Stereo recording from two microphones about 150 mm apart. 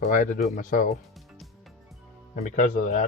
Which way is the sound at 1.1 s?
Centre (ahead or behind).